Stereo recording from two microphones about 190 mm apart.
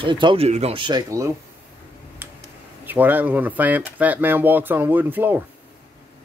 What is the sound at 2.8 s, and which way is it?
Speech, 10° right (ahead or behind).